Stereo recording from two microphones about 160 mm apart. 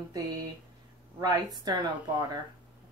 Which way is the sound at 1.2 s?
25° right (ahead or behind).